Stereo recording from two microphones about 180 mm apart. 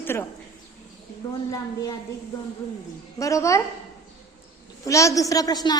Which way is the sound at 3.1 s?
15° left (ahead or behind).